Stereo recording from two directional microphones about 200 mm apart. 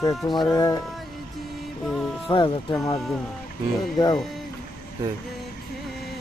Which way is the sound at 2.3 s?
20° left (ahead or behind).